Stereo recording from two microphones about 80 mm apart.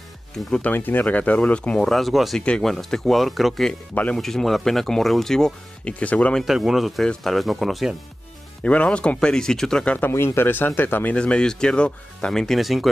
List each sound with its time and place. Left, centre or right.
0.5 s speech: centre
1.9 s speech: centre
3.9 s speech: centre
4.2 s speech: centre
6.4 s speech: centre
8.6 s speech: centre
10.1 s speech: left
11.1 s speech: centre